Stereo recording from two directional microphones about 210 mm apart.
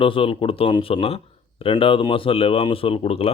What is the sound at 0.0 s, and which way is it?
Speech, 25° left (ahead or behind).